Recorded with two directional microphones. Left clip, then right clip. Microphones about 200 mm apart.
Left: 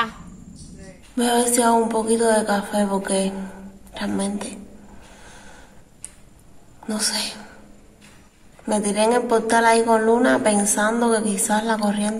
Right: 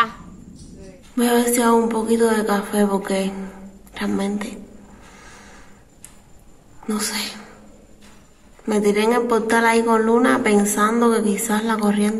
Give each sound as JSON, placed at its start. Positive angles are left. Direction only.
{"t": 1.1, "sound": "speech", "side_deg": 10}
{"t": 6.9, "sound": "speech", "side_deg": 10}
{"t": 8.6, "sound": "speech", "side_deg": 10}